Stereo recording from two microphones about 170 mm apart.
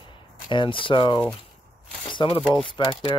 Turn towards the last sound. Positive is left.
turn(degrees=30)  # may be behind; listen again after turning